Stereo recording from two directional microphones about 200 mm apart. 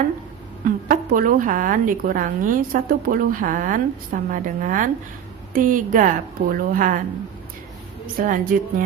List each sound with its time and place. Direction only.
0.6 s a woman's voice: 45° right (ahead or behind)
8.0 s a woman's voice: 40° right (ahead or behind)